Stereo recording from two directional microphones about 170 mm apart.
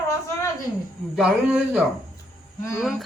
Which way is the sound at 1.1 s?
5° right (ahead or behind).